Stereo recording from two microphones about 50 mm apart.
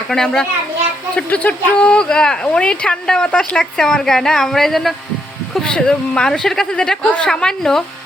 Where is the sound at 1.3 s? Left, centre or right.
Left; by 4.9 s centre.